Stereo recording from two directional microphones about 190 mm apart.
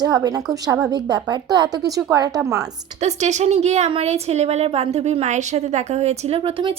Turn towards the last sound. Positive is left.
turn(degrees=-30)  # may be behind; listen again after turning